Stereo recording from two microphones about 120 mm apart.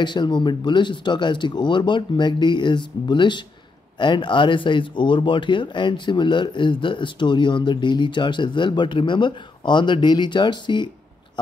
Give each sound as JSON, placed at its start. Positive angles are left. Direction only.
{"t": 0.0, "sound": "speech", "side_deg": 40}